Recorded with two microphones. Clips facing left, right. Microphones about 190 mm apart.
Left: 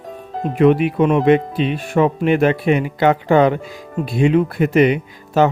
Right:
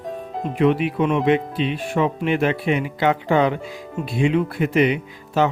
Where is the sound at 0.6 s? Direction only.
50° left (ahead or behind).